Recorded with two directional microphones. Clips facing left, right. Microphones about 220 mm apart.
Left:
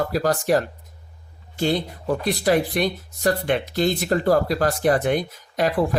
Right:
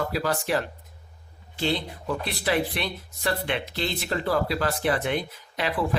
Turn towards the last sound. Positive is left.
turn(degrees=45)  # may be behind; listen again after turning